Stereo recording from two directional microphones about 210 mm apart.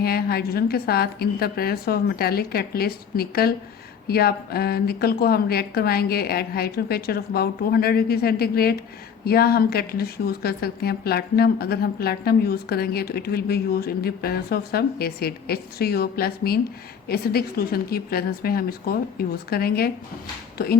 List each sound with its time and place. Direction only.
0.0 s speech: 45° left (ahead or behind)